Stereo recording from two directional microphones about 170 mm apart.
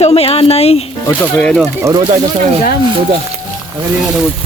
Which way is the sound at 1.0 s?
10° left (ahead or behind).